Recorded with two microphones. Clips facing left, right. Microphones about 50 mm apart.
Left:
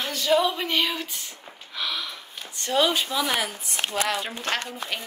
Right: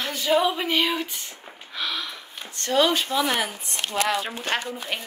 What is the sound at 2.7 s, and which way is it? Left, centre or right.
Speech, centre.